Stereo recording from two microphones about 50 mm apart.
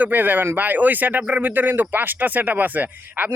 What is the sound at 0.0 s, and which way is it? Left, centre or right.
Speech, right.